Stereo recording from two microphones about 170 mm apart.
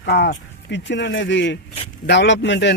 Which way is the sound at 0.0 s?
85° left.